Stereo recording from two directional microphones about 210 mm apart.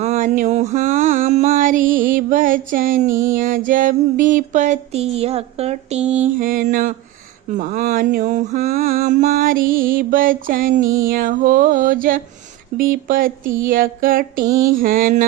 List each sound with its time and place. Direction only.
0.0 s a sound: 35° right (ahead or behind)
3.1 s music: 15° right (ahead or behind)
3.3 s music: 40° right (ahead or behind)